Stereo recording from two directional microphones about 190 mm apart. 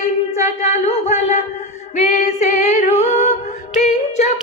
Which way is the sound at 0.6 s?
35° left (ahead or behind).